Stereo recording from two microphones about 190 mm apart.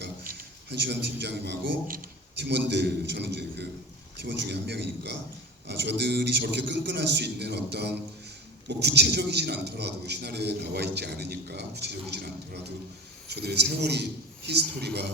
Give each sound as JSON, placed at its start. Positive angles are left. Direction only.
{"t": 0.0, "sound": "a man's voice", "side_deg": -60}